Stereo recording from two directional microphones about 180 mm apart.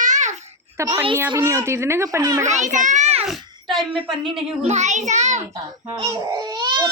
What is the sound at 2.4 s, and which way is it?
Speech, 40° right (ahead or behind).